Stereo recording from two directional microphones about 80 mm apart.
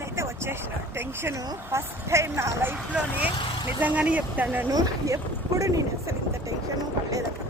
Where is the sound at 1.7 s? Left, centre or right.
Right.